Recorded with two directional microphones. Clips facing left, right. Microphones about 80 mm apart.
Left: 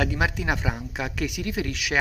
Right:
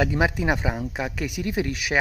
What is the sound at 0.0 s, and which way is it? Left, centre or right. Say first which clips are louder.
Speech: right 3 dB; right.